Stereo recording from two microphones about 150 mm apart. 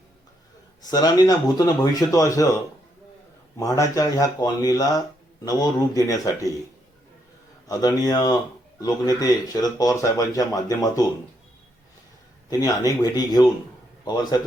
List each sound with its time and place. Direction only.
0.9 s speech: 25° left (ahead or behind)
3.6 s speech: 25° left (ahead or behind)
7.7 s speech: 25° left (ahead or behind)
12.5 s a man's voice: 25° left (ahead or behind)